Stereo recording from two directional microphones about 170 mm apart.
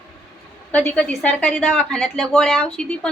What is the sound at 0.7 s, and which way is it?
A woman's voice, 5° left (ahead or behind).